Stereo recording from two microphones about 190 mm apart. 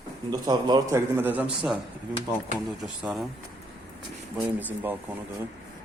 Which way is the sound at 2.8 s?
Centre (ahead or behind).